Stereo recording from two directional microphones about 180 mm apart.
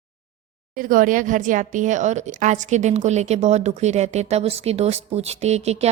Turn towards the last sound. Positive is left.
turn(degrees=-35)  # may be behind; listen again after turning